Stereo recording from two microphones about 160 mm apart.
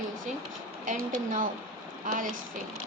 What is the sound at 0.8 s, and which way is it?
Speech, 55° right (ahead or behind).